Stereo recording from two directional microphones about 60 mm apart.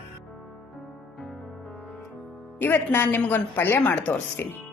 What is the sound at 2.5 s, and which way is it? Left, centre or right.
Speech, left.